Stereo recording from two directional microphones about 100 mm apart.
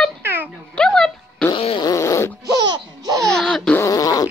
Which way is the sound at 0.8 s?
5° left (ahead or behind).